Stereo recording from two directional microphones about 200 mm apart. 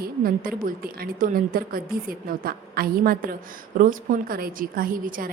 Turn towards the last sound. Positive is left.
turn(degrees=-45)  # may be behind; listen again after turning